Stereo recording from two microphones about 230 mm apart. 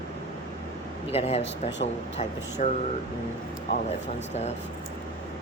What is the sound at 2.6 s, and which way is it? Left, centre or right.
Speech, left.